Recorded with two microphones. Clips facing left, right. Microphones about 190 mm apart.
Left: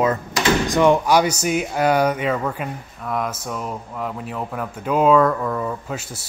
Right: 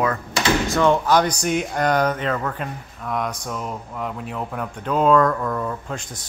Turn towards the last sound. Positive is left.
turn(degrees=5)  # may be behind; listen again after turning